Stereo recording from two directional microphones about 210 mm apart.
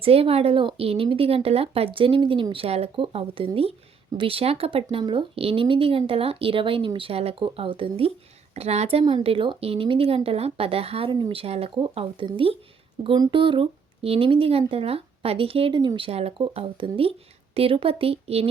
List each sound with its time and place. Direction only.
0.0 s speech: 25° right (ahead or behind)